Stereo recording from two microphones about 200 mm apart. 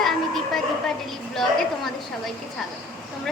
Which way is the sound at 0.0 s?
Centre (ahead or behind).